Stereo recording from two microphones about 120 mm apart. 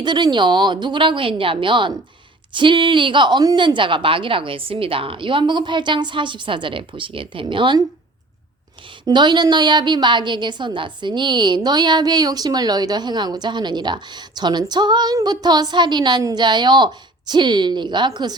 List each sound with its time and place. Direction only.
0.0 s a woman's voice: 40° right (ahead or behind)
8.9 s a woman's voice: 40° right (ahead or behind)